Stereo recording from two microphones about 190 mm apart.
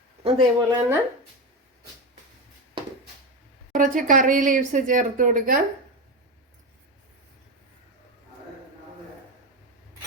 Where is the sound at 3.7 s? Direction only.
45° right (ahead or behind).